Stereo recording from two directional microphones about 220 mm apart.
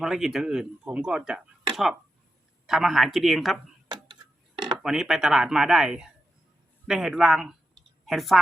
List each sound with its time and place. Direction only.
0.0 s speech: centre (ahead or behind)
3.8 s a sound: 20° right (ahead or behind)
4.8 s a woman's voice: centre (ahead or behind)